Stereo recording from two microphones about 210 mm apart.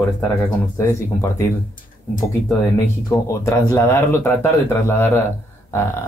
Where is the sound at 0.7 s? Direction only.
15° left (ahead or behind).